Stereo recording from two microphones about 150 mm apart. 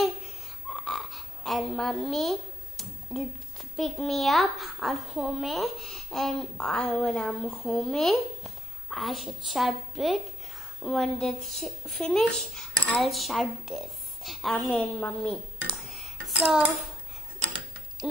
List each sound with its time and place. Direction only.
0.8 s a sound: centre (ahead or behind)
3.7 s a child's voice: centre (ahead or behind)
15.9 s dishes: centre (ahead or behind)